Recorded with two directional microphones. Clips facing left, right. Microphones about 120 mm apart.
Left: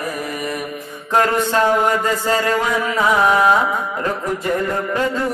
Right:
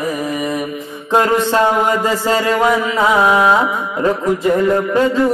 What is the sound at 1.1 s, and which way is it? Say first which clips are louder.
Music: right 3 dB; 20° right (ahead or behind).